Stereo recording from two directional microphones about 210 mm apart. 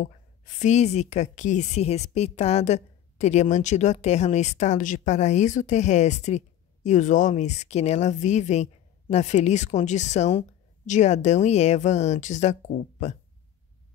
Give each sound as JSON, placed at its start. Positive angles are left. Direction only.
{"t": 0.6, "sound": "a woman's voice", "side_deg": 35}